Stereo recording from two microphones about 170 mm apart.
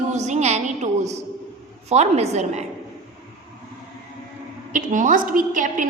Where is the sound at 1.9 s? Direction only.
40° right (ahead or behind).